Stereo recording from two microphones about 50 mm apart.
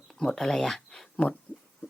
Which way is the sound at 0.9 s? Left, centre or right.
Left.